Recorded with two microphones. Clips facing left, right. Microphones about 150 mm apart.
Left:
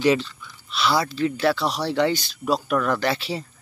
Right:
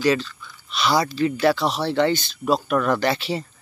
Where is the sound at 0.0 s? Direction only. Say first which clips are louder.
Left 1 dB; 20° left (ahead or behind).